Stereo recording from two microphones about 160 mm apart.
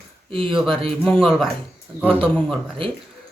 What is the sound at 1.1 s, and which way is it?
Speech, centre (ahead or behind).